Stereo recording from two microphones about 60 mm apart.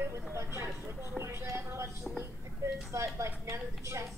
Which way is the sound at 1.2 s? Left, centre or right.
Right.